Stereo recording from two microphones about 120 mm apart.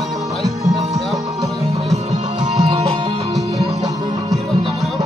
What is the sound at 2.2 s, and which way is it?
Music, 40° right (ahead or behind).